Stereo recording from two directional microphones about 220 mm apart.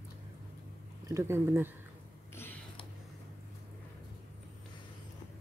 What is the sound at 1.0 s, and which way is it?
Speech, 10° right (ahead or behind).